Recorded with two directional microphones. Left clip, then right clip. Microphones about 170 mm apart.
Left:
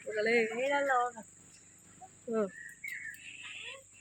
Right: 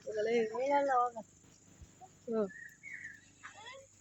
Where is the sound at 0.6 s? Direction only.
65° right (ahead or behind).